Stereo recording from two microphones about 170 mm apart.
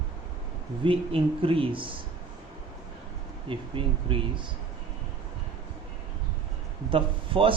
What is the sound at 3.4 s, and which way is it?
Speech, 30° right (ahead or behind).